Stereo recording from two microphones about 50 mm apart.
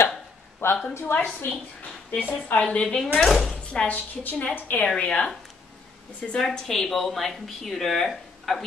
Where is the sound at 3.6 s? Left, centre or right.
Left.